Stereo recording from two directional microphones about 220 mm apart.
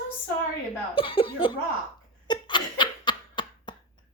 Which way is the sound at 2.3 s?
20° left (ahead or behind).